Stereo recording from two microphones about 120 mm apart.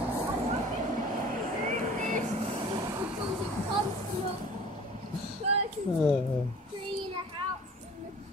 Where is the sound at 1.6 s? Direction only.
90° right.